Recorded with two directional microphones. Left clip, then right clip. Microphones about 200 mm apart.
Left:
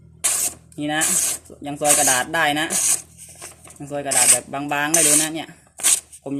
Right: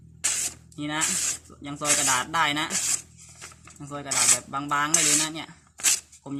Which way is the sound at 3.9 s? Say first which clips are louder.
Left 10 dB; 25° right (ahead or behind).